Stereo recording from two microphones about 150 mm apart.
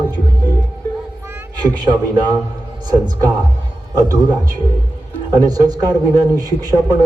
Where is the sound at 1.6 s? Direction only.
30° right (ahead or behind).